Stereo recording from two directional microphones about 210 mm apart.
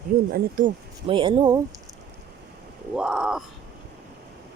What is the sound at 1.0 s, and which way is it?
Speech, 25° right (ahead or behind).